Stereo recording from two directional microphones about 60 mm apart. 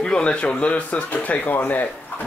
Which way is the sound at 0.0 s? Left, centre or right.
Centre.